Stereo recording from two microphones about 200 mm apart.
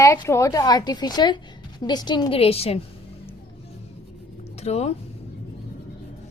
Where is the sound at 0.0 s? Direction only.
15° left (ahead or behind); by 2.8 s 30° left (ahead or behind).